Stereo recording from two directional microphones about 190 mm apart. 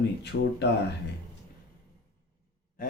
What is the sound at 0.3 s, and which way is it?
Speech, 60° left (ahead or behind).